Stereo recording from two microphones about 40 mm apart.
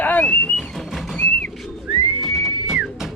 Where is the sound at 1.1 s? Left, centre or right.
Left.